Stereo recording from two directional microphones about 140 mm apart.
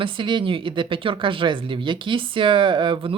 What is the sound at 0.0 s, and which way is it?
Speech, 35° right (ahead or behind).